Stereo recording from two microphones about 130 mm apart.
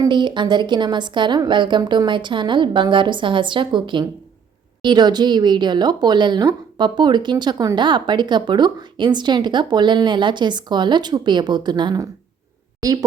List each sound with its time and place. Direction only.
0.0 s a woman's voice: 35° right (ahead or behind)